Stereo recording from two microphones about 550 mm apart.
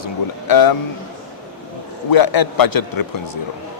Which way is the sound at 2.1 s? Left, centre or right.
Left.